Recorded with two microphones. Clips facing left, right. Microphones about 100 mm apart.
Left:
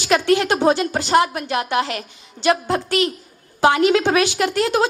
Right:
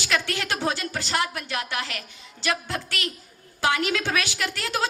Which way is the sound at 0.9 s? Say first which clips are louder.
Left 11 dB; 50° left (ahead or behind).